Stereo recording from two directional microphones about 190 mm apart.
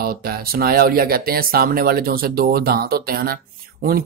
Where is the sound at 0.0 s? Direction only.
55° right (ahead or behind).